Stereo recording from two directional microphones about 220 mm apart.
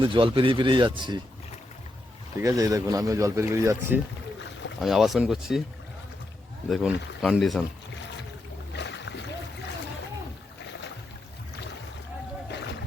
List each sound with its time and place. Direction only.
0.0 s speech: 25° right (ahead or behind)
2.4 s speech: 15° right (ahead or behind)
6.7 s speech: centre (ahead or behind)
8.7 s boat: 50° left (ahead or behind)
12.5 s a sound: 50° left (ahead or behind)